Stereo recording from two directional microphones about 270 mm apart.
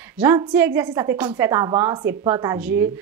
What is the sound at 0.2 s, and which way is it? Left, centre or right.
A woman's voice, centre.